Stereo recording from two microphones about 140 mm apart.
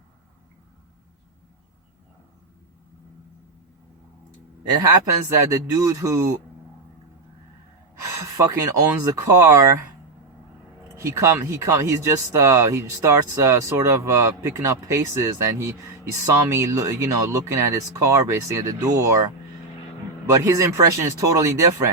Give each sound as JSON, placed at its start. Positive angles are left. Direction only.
{"t": 4.7, "sound": "speech", "side_deg": -25}
{"t": 9.0, "sound": "speech", "side_deg": -20}
{"t": 10.9, "sound": "speech", "side_deg": -20}